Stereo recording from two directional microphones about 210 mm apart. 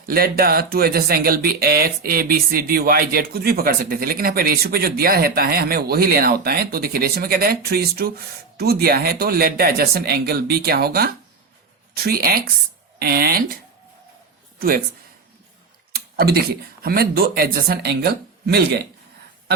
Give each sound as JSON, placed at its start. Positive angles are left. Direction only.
{"t": 0.0, "sound": "speech", "side_deg": -45}
{"t": 16.1, "sound": "speech", "side_deg": -50}